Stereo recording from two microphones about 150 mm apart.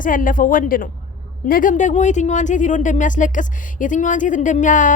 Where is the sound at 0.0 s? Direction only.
65° left (ahead or behind).